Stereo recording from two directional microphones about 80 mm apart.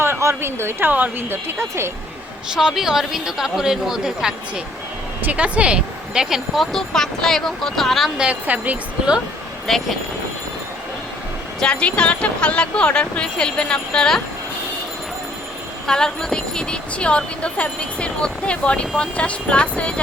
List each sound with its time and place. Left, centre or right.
0.0 s a woman's voice: right
2.6 s speech: centre
6.7 s speech: centre
8.2 s speech: centre
9.7 s speech: centre
11.6 s a woman's voice: centre
15.9 s a woman's voice: centre